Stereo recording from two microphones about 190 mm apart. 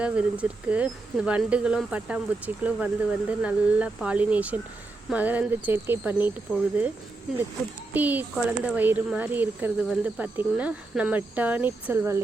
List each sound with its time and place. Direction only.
0.0 s speech: 5° right (ahead or behind)
6.5 s speech: 10° left (ahead or behind)
7.9 s speech: 10° right (ahead or behind)